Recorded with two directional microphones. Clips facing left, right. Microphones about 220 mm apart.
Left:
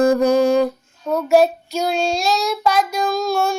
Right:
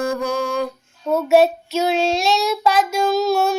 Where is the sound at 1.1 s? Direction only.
Centre (ahead or behind).